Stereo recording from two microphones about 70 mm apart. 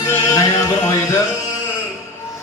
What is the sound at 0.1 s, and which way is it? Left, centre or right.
Music, left.